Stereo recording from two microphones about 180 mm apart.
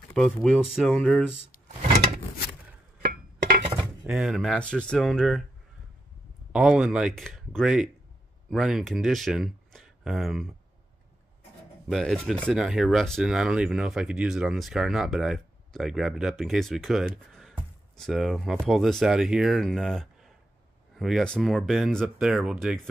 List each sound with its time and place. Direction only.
0.1 s speech: centre (ahead or behind)
3.0 s a sound: 55° right (ahead or behind)
4.0 s speech: 5° right (ahead or behind)
6.5 s speech: 5° right (ahead or behind)
11.9 s speech: centre (ahead or behind)
17.3 s a sound: centre (ahead or behind)
17.9 s speech: centre (ahead or behind)